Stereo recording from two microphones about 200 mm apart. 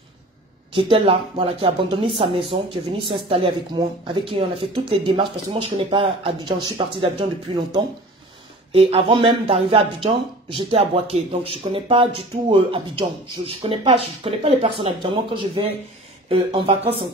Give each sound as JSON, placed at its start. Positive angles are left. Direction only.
{"t": 0.7, "sound": "speech", "side_deg": -25}
{"t": 16.3, "sound": "speech", "side_deg": -25}